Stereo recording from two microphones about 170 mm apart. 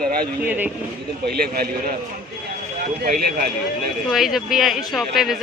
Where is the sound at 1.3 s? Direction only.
65° right (ahead or behind).